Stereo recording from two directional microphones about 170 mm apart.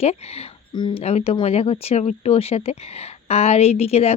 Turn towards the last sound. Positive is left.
turn(degrees=35)  # may be behind; listen again after turning